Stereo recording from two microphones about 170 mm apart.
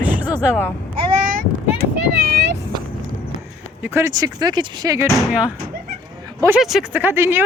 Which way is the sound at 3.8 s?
15° right (ahead or behind).